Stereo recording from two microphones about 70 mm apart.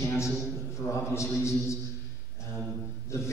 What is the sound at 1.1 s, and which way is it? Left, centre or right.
Speech, left.